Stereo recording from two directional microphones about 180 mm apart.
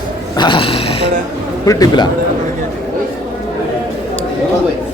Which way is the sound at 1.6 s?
20° left (ahead or behind).